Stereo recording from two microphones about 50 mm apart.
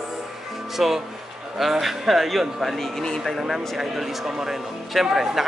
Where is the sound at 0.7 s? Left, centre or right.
Centre.